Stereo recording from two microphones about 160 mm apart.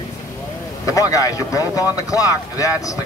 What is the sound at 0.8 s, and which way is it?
A man's voice, 20° left (ahead or behind).